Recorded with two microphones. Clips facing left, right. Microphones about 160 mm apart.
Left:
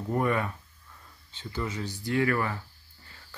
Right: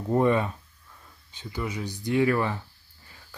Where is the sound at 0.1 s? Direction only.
25° right (ahead or behind).